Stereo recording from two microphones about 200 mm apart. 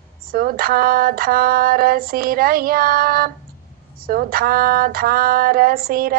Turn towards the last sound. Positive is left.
turn(degrees=-50)  # may be behind; listen again after turning